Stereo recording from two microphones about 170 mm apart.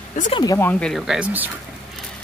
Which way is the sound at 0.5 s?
10° left (ahead or behind).